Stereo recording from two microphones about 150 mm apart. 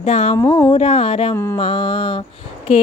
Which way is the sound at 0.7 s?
45° left (ahead or behind).